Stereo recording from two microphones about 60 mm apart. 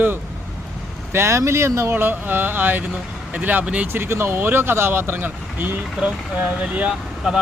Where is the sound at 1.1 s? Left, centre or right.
Right.